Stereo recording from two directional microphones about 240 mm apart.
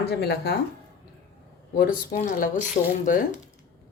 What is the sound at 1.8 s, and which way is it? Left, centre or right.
A woman's voice, left.